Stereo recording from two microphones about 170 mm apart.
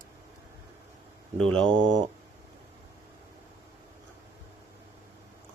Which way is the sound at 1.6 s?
25° right (ahead or behind).